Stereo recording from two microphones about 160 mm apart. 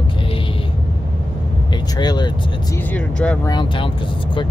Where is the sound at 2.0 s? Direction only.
25° left (ahead or behind).